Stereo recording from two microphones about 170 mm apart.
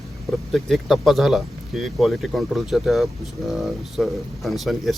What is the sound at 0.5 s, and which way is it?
Speech, centre (ahead or behind).